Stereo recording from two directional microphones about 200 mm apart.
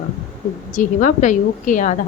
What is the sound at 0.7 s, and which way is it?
A woman's voice, 40° left (ahead or behind).